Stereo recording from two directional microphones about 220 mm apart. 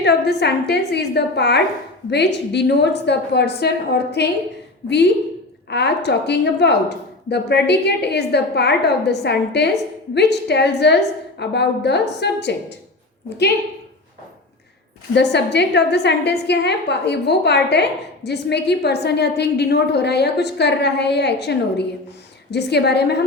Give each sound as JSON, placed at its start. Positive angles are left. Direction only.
{"t": 0.0, "sound": "a woman's voice", "side_deg": 50}
{"t": 5.7, "sound": "a woman's voice", "side_deg": 50}
{"t": 15.1, "sound": "a woman's voice", "side_deg": 50}